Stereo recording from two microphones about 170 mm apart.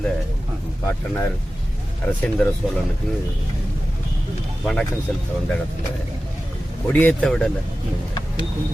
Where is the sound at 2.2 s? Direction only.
5° left (ahead or behind).